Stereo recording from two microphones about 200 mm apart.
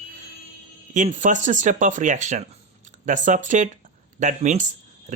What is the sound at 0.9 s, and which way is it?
Speech, 40° right (ahead or behind).